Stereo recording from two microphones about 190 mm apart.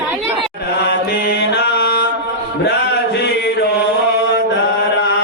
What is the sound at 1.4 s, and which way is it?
Music, 65° left (ahead or behind).